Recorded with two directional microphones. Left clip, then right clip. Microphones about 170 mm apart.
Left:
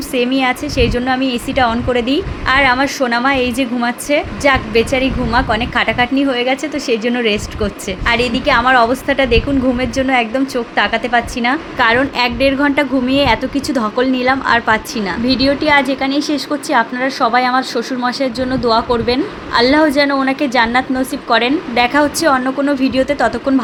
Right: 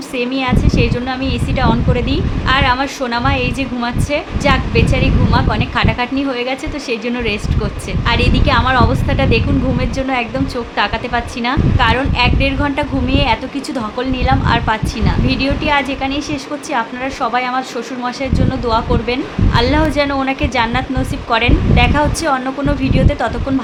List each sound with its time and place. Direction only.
0.2 s a woman's voice: 30° left (ahead or behind)